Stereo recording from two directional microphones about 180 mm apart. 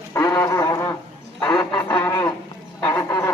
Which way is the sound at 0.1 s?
20° left (ahead or behind).